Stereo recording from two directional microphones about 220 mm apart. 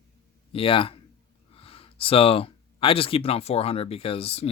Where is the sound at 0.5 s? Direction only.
25° left (ahead or behind).